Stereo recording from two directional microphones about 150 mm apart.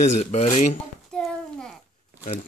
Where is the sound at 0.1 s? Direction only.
50° left (ahead or behind).